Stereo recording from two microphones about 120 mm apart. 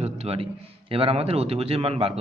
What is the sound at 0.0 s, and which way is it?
A man's voice, 55° right (ahead or behind).